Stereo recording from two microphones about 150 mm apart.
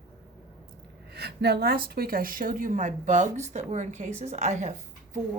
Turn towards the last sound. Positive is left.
turn(degrees=-50)  # may be behind; listen again after turning